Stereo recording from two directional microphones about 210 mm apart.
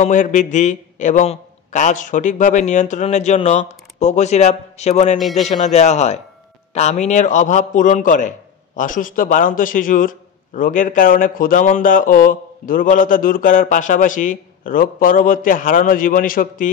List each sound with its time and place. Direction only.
0.0 s a man's voice: 35° left (ahead or behind)